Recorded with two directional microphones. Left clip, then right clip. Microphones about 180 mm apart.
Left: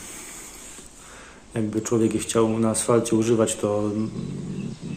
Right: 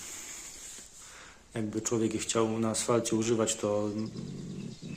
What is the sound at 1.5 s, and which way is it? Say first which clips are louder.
Speech: left 8 dB; 15° right (ahead or behind).